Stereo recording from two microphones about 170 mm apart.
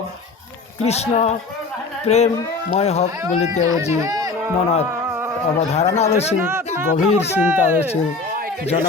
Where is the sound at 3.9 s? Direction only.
20° right (ahead or behind).